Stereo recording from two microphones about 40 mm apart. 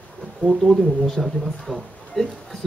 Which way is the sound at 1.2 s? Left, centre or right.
Centre.